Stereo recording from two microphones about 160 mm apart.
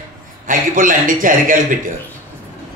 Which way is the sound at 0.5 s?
55° right (ahead or behind).